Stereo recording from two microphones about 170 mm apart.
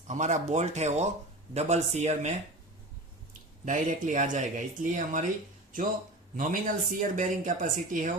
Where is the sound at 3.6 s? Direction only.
50° right (ahead or behind).